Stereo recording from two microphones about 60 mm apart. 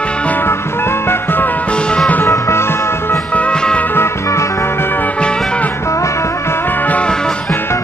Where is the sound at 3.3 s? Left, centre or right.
Centre.